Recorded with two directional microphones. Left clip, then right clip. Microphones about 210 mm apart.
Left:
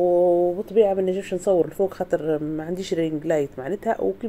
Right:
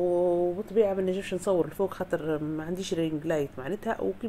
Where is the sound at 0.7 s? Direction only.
10° left (ahead or behind).